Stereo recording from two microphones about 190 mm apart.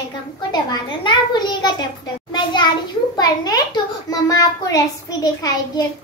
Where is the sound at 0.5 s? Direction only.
20° left (ahead or behind).